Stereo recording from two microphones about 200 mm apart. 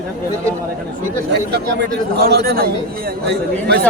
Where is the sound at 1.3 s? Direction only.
55° right (ahead or behind).